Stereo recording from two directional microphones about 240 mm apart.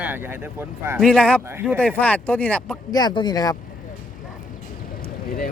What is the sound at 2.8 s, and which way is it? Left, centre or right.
Speech, centre.